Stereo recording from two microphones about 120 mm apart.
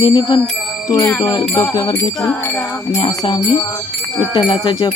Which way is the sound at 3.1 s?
30° left (ahead or behind).